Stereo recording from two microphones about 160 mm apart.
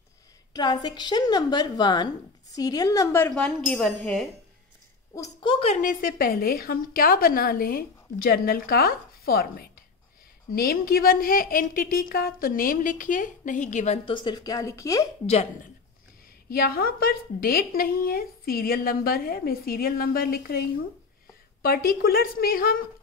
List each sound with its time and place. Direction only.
0.5 s a woman's voice: 25° left (ahead or behind); by 4.3 s 5° left (ahead or behind)
5.1 s a woman's voice: 20° left (ahead or behind)
5.5 s a woman's voice: 40° left (ahead or behind)
5.8 s a woman's voice: 60° left (ahead or behind)
14.0 s a woman's voice: 30° left (ahead or behind)
16.4 s a woman's voice: 70° left (ahead or behind)
21.6 s a woman's voice: 70° left (ahead or behind)